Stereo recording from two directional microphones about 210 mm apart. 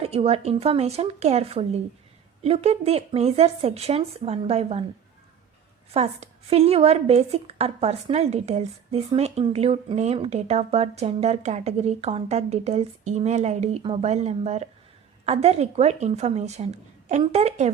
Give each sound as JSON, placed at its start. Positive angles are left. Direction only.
{"t": 0.0, "sound": "speech", "side_deg": -30}
{"t": 5.9, "sound": "speech", "side_deg": -30}